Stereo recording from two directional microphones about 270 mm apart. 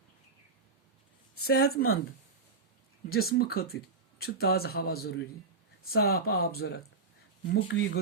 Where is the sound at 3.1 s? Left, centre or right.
Left.